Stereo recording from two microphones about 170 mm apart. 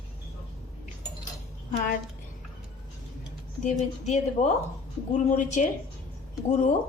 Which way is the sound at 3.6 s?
45° left (ahead or behind).